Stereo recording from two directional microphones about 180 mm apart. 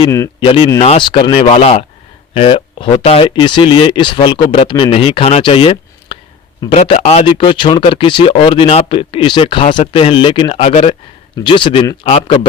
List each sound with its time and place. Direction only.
0.3 s speech: 30° left (ahead or behind)